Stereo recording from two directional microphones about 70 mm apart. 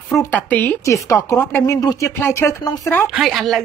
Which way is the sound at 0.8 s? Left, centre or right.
Left.